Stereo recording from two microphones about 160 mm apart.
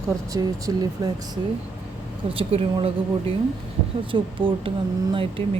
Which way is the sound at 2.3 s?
35° right (ahead or behind).